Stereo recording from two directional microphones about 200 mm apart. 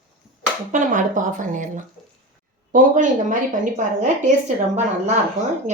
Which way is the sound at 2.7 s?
40° right (ahead or behind).